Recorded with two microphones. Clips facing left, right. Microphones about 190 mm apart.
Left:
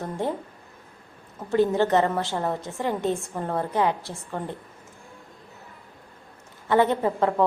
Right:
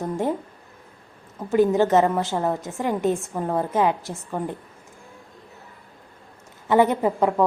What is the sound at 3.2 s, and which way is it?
Speech, 5° right (ahead or behind).